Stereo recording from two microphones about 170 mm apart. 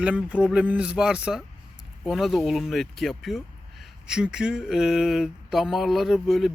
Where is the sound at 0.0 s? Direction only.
5° right (ahead or behind).